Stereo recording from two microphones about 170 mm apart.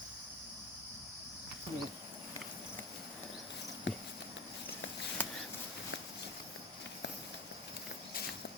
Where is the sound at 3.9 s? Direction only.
90° left.